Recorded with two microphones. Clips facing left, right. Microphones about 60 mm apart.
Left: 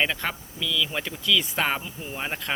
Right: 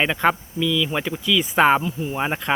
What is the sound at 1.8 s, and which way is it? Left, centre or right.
Speech, centre.